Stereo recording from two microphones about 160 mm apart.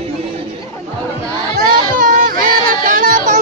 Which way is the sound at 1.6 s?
65° right (ahead or behind).